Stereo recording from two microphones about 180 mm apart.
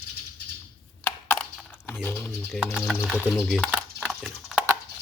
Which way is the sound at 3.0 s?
5° left (ahead or behind).